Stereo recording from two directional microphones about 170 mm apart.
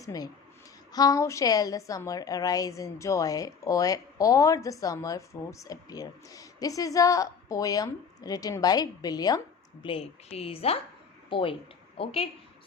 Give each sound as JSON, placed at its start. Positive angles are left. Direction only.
{"t": 0.0, "sound": "a woman's voice", "side_deg": 20}
{"t": 9.8, "sound": "a woman's voice", "side_deg": 35}